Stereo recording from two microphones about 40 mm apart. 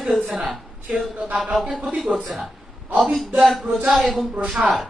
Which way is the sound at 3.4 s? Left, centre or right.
Centre.